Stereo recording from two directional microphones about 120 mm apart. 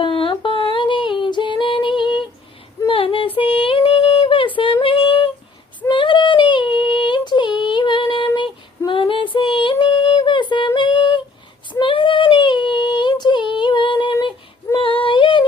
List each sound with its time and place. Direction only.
0.0 s female singing: 45° left (ahead or behind)
4.5 s child singing: 45° left (ahead or behind)
5.9 s female singing: 45° left (ahead or behind)
8.9 s a sound: 45° left (ahead or behind)
10.8 s female singing: 40° left (ahead or behind)
11.7 s child singing: 45° left (ahead or behind)